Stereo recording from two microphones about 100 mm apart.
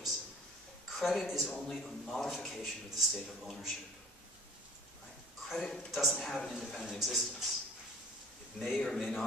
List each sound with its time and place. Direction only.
0.9 s a man's voice: centre (ahead or behind)
5.5 s a man's voice: 5° left (ahead or behind)
8.5 s a man's voice: centre (ahead or behind)